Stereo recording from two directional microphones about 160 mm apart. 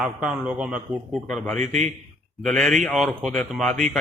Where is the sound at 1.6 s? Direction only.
50° right (ahead or behind).